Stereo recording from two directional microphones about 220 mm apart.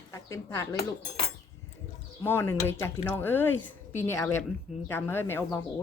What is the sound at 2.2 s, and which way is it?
Speech, 10° left (ahead or behind).